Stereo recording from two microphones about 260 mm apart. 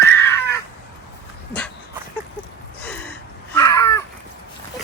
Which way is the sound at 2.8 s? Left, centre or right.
Centre.